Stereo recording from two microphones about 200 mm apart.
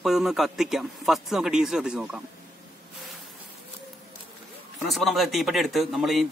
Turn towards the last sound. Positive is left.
turn(degrees=0)  # may be behind; listen again after turning